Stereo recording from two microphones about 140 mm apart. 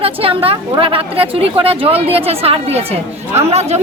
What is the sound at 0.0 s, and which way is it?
A woman's voice, 45° right (ahead or behind).